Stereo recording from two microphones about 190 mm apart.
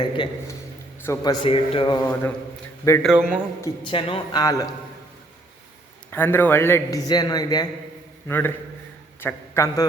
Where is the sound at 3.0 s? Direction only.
5° right (ahead or behind).